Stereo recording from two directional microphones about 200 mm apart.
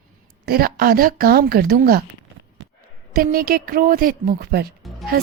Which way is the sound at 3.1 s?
45° right (ahead or behind).